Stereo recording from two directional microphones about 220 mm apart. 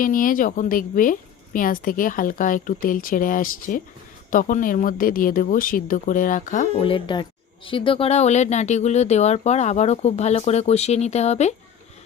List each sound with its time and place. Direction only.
0.0 s speech: 40° left (ahead or behind)
6.8 s speech: 20° left (ahead or behind)